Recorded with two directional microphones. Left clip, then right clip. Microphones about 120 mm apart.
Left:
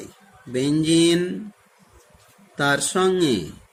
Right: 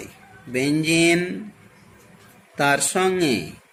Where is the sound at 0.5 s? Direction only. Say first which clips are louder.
Left 1 dB; 90° left.